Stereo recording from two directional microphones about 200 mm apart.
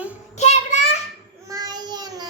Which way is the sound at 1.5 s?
20° right (ahead or behind).